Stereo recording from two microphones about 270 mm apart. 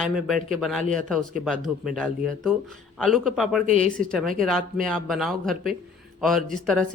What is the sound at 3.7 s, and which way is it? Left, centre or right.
Speech, right.